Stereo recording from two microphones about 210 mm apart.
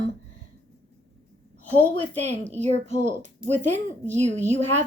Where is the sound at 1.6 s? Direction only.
10° left (ahead or behind).